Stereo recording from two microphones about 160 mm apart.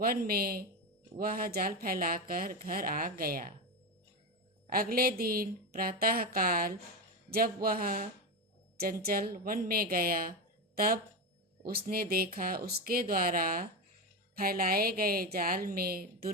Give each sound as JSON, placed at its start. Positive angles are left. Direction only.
{"t": 0.0, "sound": "speech", "side_deg": -65}
{"t": 4.7, "sound": "speech", "side_deg": -65}